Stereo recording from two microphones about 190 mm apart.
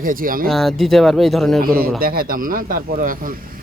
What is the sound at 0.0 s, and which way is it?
Speech, 45° right (ahead or behind).